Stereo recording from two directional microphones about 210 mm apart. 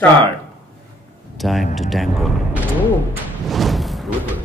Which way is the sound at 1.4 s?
Centre (ahead or behind).